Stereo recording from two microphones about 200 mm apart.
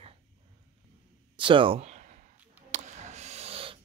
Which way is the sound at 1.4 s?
25° right (ahead or behind).